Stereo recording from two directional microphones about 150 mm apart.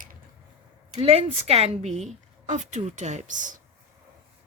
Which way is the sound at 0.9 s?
40° right (ahead or behind).